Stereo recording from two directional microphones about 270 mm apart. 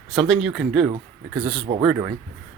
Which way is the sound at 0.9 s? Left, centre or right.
Centre.